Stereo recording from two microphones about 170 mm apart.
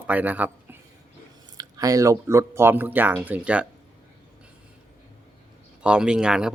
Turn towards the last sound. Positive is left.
turn(degrees=-5)  # may be behind; listen again after turning